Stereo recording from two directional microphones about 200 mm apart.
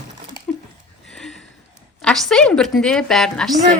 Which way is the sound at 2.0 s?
5° left (ahead or behind).